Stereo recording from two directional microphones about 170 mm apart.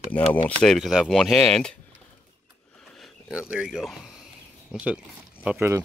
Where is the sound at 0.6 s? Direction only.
Centre (ahead or behind).